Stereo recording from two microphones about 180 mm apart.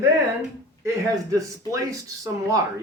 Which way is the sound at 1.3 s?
20° right (ahead or behind).